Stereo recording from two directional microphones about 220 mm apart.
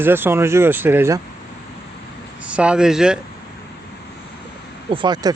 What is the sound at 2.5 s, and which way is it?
Speech, 5° right (ahead or behind).